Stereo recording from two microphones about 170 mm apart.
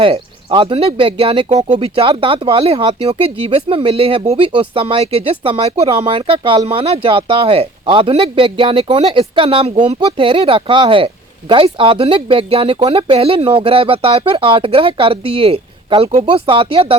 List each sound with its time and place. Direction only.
0.0 s speech: 30° right (ahead or behind)